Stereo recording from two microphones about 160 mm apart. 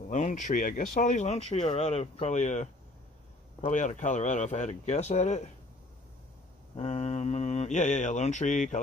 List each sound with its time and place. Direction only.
0.1 s speech: 50° left (ahead or behind)
6.8 s speech: 40° left (ahead or behind)